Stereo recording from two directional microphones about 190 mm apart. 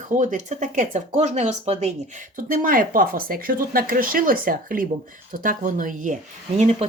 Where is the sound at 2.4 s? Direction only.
45° right (ahead or behind).